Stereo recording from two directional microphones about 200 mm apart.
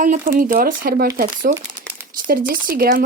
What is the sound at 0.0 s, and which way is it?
Speech, 40° right (ahead or behind).